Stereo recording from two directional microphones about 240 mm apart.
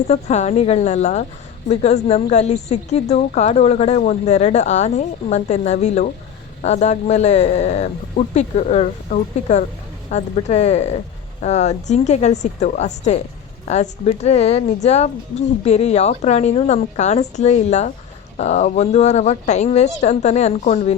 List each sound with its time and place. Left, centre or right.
0.1 s a woman's voice: left